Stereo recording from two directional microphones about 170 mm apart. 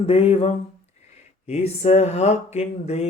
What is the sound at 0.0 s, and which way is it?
Mantra, 35° left (ahead or behind).